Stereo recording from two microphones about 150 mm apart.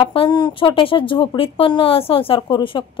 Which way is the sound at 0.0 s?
35° left (ahead or behind).